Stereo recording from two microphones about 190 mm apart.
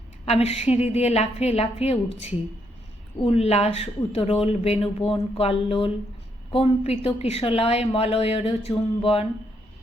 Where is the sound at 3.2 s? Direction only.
35° left (ahead or behind).